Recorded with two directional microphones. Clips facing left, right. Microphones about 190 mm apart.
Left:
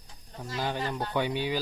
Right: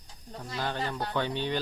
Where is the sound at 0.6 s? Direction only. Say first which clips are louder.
Left 1 dB; 10° left (ahead or behind).